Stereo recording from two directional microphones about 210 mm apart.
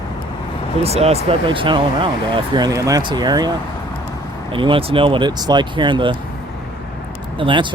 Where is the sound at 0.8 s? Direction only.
30° right (ahead or behind).